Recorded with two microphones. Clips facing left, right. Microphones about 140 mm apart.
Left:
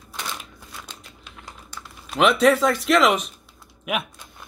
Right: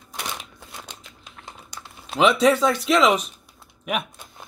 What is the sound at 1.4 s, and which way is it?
Crumpling, 25° right (ahead or behind).